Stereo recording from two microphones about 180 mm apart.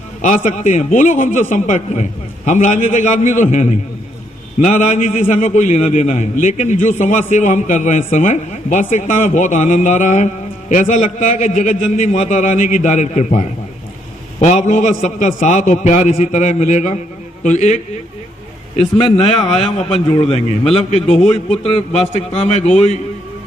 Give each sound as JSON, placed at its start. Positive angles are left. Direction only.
{"t": 0.2, "sound": "a man's voice", "side_deg": 40}
{"t": 14.4, "sound": "a man's voice", "side_deg": 40}
{"t": 18.8, "sound": "a man's voice", "side_deg": 30}